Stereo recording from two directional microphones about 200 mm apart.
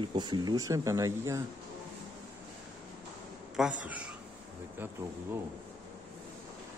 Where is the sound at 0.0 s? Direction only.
20° right (ahead or behind).